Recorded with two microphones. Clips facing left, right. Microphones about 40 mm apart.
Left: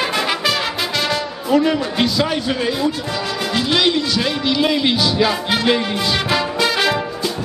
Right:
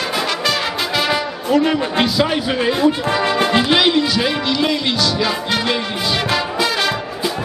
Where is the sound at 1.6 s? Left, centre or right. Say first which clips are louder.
Right 1 dB; centre.